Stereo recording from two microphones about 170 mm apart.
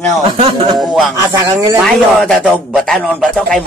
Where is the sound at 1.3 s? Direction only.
25° right (ahead or behind).